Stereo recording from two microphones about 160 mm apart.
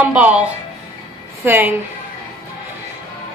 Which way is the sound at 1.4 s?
15° right (ahead or behind).